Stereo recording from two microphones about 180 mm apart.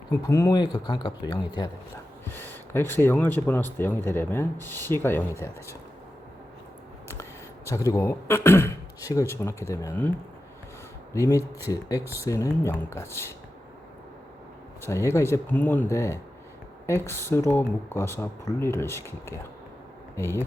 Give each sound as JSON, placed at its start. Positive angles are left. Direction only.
{"t": 0.1, "sound": "speech", "side_deg": 15}
{"t": 2.2, "sound": "speech", "side_deg": 10}
{"t": 7.1, "sound": "speech", "side_deg": 15}
{"t": 11.1, "sound": "speech", "side_deg": 15}
{"t": 14.8, "sound": "speech", "side_deg": 15}